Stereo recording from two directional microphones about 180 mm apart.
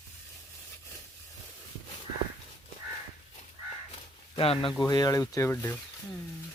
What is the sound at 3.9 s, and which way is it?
Speech, 30° left (ahead or behind).